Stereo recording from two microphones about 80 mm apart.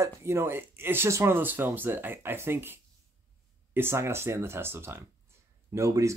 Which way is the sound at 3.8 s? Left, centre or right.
Right.